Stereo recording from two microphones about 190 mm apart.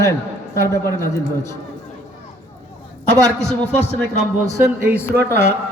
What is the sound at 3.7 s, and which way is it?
Speech, 35° left (ahead or behind).